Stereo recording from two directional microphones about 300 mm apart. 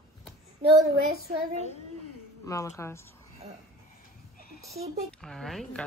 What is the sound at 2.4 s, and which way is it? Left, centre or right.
Speech, centre.